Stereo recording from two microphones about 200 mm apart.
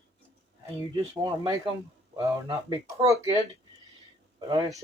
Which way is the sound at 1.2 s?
20° right (ahead or behind).